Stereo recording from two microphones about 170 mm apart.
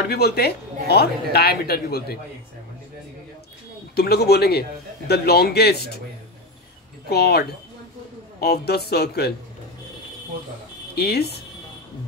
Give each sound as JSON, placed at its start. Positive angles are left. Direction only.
{"t": 0.1, "sound": "speech", "side_deg": 70}
{"t": 3.9, "sound": "speech", "side_deg": 65}
{"t": 7.1, "sound": "speech", "side_deg": 70}
{"t": 11.0, "sound": "speech", "side_deg": 70}